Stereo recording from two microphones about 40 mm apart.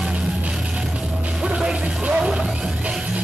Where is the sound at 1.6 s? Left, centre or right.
Right.